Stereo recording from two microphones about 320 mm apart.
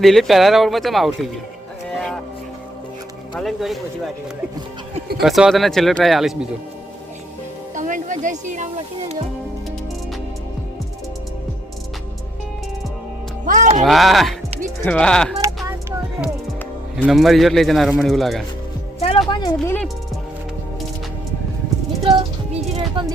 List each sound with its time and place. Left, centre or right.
0.0 s speech: centre
1.9 s music: centre
3.3 s speech: centre
4.9 s music: right
5.2 s speech: centre
7.8 s speech: right
13.4 s speech: right
13.8 s speech: centre
17.0 s speech: centre
18.9 s music: centre
19.3 s speech: centre
22.7 s music: centre